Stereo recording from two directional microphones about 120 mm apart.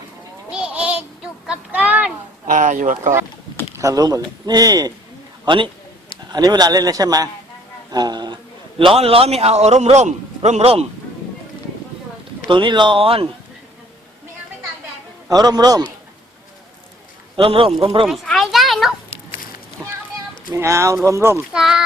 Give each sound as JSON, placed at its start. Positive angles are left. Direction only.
{"t": 0.5, "sound": "a sound", "side_deg": -10}
{"t": 2.5, "sound": "speech", "side_deg": -90}
{"t": 3.8, "sound": "a man's voice", "side_deg": -30}
{"t": 5.5, "sound": "a man's voice", "side_deg": -45}
{"t": 8.8, "sound": "a man's voice", "side_deg": -50}
{"t": 12.5, "sound": "speech", "side_deg": -40}
{"t": 15.3, "sound": "a man's voice", "side_deg": -35}
{"t": 17.3, "sound": "speech", "side_deg": -50}
{"t": 18.0, "sound": "a sound", "side_deg": 0}
{"t": 19.8, "sound": "a sound", "side_deg": -25}
{"t": 20.5, "sound": "speech", "side_deg": -25}
{"t": 21.5, "sound": "speech", "side_deg": -5}